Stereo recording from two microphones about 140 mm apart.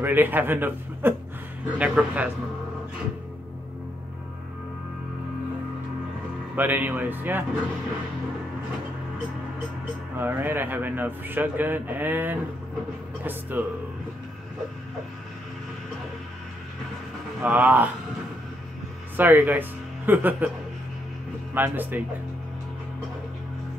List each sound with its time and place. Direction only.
0.0 s speech: 15° right (ahead or behind)
6.5 s speech: 15° right (ahead or behind)
10.1 s speech: 15° right (ahead or behind)
17.4 s speech: 10° right (ahead or behind)
19.1 s speech: 15° right (ahead or behind)
21.5 s speech: 15° right (ahead or behind)